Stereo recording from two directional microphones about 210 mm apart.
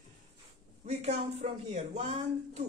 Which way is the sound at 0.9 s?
30° right (ahead or behind).